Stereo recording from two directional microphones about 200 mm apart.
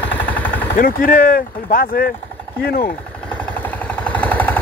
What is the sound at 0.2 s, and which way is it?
Vehicle, 10° left (ahead or behind).